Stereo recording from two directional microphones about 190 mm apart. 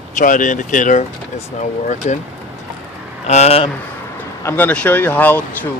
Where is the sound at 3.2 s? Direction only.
35° left (ahead or behind).